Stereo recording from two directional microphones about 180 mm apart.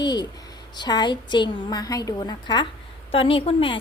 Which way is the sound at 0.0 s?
25° left (ahead or behind).